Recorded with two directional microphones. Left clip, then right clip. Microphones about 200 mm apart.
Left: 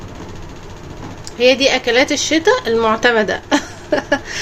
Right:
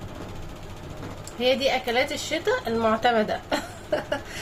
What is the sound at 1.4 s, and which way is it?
A woman's voice, 50° left (ahead or behind).